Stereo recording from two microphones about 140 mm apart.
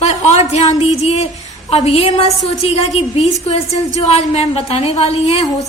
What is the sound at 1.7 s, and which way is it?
A woman's voice, 50° left (ahead or behind).